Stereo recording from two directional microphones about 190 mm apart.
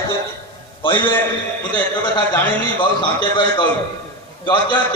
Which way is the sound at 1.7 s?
20° left (ahead or behind).